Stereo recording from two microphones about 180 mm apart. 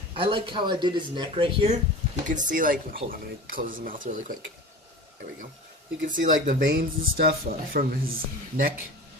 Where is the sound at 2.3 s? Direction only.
45° right (ahead or behind).